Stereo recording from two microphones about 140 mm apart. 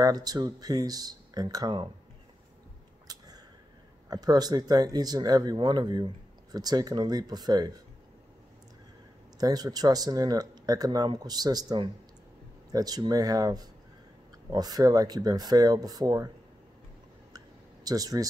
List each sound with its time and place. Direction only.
0.0 s speech: 25° right (ahead or behind)
4.1 s speech: 30° right (ahead or behind)
9.4 s speech: 25° right (ahead or behind)
17.8 s speech: 25° right (ahead or behind)